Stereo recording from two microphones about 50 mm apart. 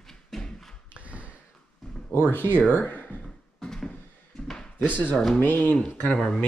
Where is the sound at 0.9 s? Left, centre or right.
Right.